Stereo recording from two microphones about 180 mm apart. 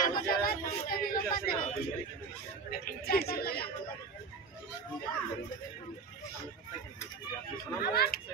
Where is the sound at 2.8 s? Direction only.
60° left (ahead or behind).